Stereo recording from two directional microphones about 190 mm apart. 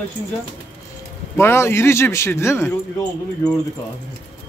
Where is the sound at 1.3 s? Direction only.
15° left (ahead or behind).